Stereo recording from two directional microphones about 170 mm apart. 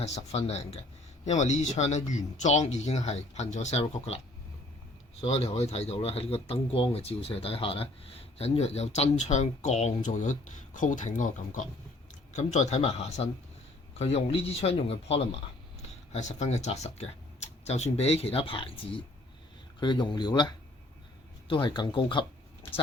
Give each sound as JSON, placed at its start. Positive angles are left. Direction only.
{"t": 0.0, "sound": "speech", "side_deg": 40}
{"t": 5.2, "sound": "speech", "side_deg": 35}
{"t": 16.1, "sound": "speech", "side_deg": 40}